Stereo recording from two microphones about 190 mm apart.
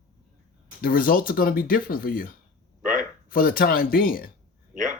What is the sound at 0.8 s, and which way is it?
Speech, 50° left (ahead or behind).